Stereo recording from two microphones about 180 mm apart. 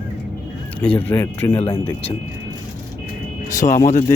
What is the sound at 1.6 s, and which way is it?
Speech, 30° left (ahead or behind).